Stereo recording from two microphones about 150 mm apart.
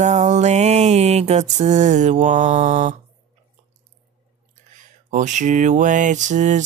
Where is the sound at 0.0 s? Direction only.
50° right (ahead or behind).